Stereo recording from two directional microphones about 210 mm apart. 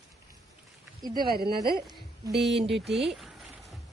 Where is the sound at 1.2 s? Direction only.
50° right (ahead or behind).